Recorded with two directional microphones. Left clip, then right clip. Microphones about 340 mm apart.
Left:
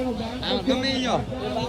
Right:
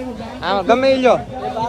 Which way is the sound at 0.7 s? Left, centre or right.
Centre.